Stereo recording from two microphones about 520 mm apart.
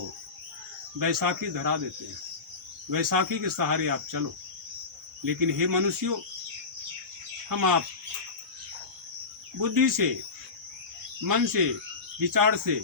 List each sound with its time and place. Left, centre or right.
0.9 s speech: right
2.9 s speech: right
5.2 s speech: right
7.5 s speech: right
9.6 s speech: right
11.3 s speech: right